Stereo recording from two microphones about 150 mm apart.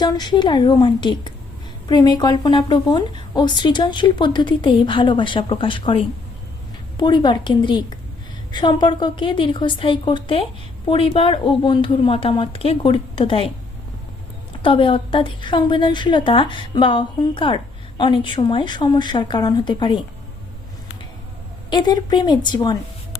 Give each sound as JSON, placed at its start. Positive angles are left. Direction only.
{"t": 0.0, "sound": "a woman's voice", "side_deg": 30}
{"t": 14.6, "sound": "a woman's voice", "side_deg": 35}
{"t": 21.7, "sound": "a woman's voice", "side_deg": 30}